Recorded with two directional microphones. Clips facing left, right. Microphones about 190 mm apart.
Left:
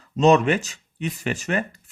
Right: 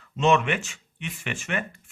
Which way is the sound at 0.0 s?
40° left (ahead or behind).